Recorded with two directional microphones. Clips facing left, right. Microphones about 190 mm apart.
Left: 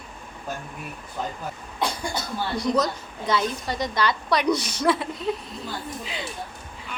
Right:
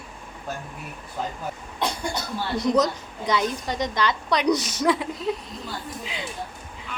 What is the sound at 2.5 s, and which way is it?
A woman's voice, 20° right (ahead or behind).